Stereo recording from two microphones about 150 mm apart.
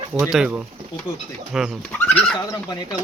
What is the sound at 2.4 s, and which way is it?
Speech, 25° left (ahead or behind).